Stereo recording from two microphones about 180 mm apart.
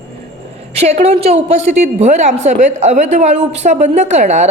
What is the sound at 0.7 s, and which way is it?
A woman's voice, 35° right (ahead or behind).